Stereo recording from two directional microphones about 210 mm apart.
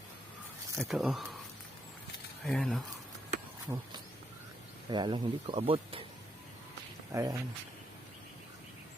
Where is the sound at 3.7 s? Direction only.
15° right (ahead or behind).